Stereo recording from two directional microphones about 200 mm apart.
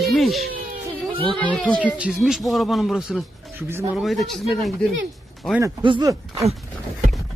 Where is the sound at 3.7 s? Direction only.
10° right (ahead or behind).